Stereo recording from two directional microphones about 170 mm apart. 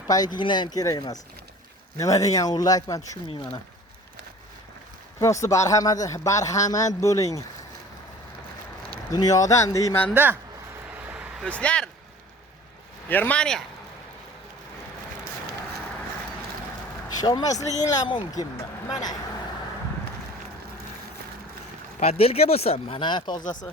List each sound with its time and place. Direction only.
0.1 s a man's voice: 25° left (ahead or behind)
5.2 s a man's voice: 20° left (ahead or behind)
9.1 s a man's voice: 20° left (ahead or behind)
10.9 s vehicle: 10° right (ahead or behind)
11.4 s speech: 5° left (ahead or behind)
13.1 s speech: 10° left (ahead or behind)
17.1 s a man's voice: 25° left (ahead or behind)
22.0 s speech: 35° left (ahead or behind)